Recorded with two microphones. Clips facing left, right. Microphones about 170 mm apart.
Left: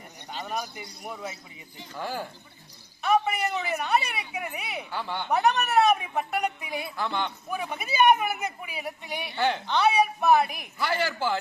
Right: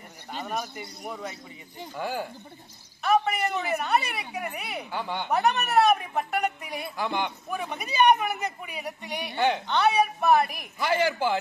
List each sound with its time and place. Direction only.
0.3 s a man's voice: centre (ahead or behind)
2.0 s a man's voice: 15° right (ahead or behind)
3.0 s a woman's voice: centre (ahead or behind)
4.9 s a man's voice: 15° right (ahead or behind)
5.3 s speech: centre (ahead or behind)
7.0 s a man's voice: 15° right (ahead or behind)
7.4 s speech: 5° left (ahead or behind)
10.8 s speech: 20° right (ahead or behind)